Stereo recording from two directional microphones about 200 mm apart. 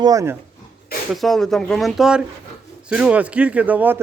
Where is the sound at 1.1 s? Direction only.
Centre (ahead or behind).